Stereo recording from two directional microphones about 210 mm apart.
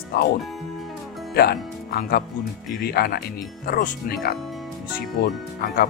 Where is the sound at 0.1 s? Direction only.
50° left (ahead or behind).